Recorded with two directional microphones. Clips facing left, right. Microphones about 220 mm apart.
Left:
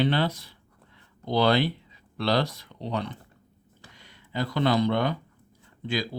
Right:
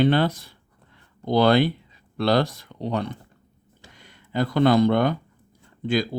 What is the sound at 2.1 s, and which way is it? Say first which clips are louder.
Speech: right 4 dB; 50° right (ahead or behind).